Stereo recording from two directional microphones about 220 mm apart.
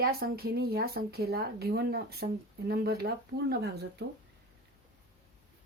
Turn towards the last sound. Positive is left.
turn(degrees=-50)  # may be behind; listen again after turning